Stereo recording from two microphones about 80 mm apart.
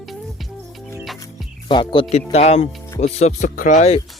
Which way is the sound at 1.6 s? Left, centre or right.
Left.